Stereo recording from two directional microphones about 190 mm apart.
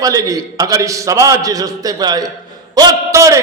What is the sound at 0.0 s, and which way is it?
A man's voice, 20° right (ahead or behind).